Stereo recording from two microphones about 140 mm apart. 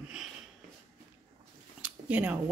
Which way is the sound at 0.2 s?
5° right (ahead or behind).